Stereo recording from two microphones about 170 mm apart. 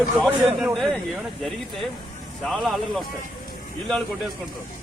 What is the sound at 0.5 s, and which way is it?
Speech, centre (ahead or behind).